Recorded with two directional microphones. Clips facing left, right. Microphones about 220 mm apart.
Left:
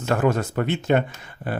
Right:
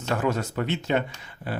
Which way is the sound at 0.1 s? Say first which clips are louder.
Left 4 dB; 50° left (ahead or behind).